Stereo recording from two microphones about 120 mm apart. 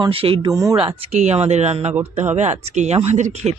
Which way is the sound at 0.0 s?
50° right (ahead or behind).